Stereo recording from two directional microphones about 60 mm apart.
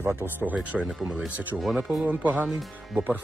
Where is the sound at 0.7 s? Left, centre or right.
Centre.